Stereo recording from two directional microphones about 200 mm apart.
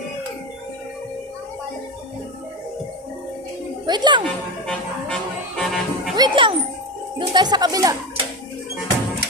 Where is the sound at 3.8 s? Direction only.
20° right (ahead or behind).